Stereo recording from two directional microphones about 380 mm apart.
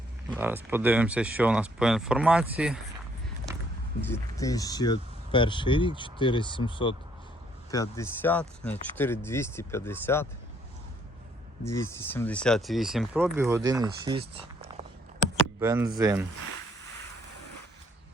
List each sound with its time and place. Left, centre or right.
0.3 s speech: centre
4.1 s speech: centre
11.6 s speech: centre